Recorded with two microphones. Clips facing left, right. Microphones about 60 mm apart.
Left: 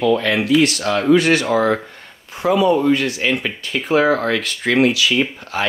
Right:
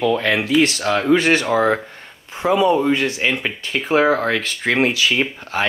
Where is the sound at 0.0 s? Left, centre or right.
Right.